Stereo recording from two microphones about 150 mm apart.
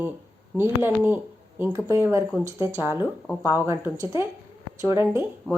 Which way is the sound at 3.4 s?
20° right (ahead or behind).